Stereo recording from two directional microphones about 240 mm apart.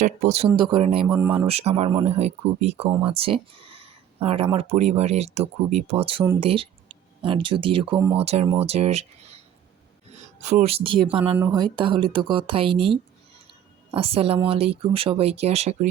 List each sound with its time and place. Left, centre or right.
0.0 s speech: right
1.0 s speech: centre
1.3 s speech: right
7.9 s speech: centre
8.2 s speech: right